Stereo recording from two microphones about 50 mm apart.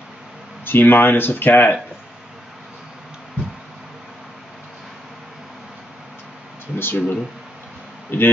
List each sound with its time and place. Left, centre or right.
0.7 s speech: left
6.8 s speech: left